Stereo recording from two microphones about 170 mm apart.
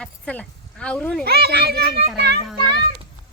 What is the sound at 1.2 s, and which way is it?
A child's voice, 70° right (ahead or behind).